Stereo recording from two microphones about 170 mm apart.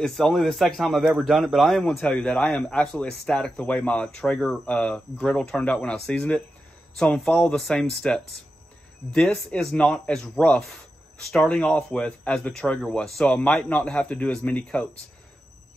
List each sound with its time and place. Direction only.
0.0 s speech: centre (ahead or behind)